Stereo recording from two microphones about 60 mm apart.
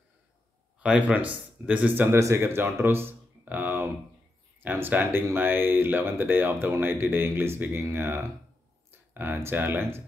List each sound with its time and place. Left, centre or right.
0.7 s speech: right
2.0 s speech: right
2.4 s speech: right
3.4 s speech: right